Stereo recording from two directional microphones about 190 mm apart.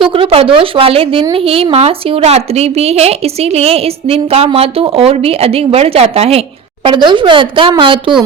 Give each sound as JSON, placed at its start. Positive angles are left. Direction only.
{"t": 0.1, "sound": "a woman's voice", "side_deg": -30}